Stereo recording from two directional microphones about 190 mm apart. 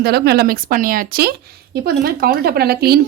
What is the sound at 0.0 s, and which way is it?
Speech, 55° right (ahead or behind).